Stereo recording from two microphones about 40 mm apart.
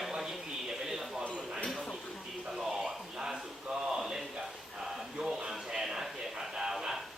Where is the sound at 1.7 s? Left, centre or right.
Centre.